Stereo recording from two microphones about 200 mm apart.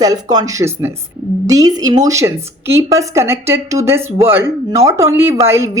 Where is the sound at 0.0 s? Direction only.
20° right (ahead or behind).